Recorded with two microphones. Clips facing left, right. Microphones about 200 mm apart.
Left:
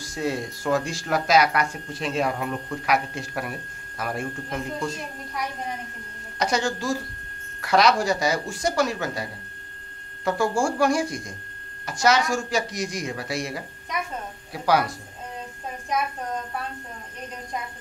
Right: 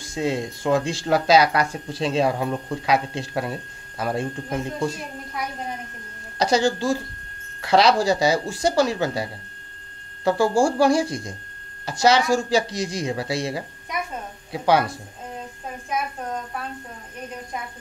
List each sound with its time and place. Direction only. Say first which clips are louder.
0.0 s speech: right 3 dB; 25° right (ahead or behind)
6.3 s speech: right 5 dB; 35° right (ahead or behind)